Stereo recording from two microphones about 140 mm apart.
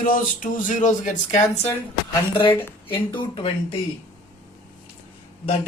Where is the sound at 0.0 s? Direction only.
75° left (ahead or behind).